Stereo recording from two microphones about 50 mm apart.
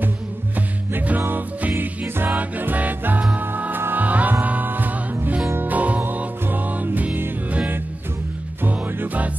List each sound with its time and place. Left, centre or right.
0.6 s music: right
1.7 s music: right
2.2 s music: right
8.6 s music: right